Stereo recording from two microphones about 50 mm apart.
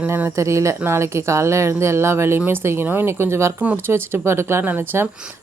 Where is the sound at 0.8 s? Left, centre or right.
Right.